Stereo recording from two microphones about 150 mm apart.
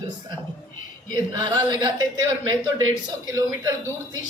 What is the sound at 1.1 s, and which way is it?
Speech, 30° right (ahead or behind).